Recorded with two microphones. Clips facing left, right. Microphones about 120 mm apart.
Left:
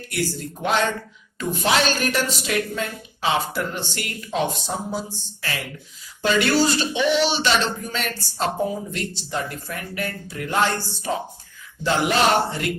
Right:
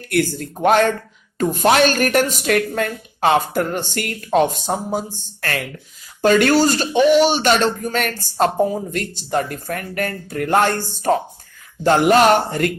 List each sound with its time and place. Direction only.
0.1 s speech: 55° right (ahead or behind)